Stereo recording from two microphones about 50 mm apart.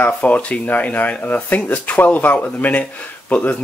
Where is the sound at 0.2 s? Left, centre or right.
Left.